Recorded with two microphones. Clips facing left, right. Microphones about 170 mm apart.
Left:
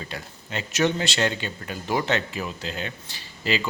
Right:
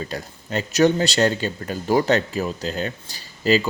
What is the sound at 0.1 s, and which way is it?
Speech, 40° right (ahead or behind).